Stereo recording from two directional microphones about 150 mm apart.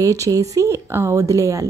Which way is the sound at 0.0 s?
20° right (ahead or behind).